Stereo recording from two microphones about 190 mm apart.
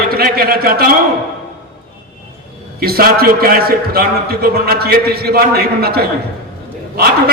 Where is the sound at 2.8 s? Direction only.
50° right (ahead or behind).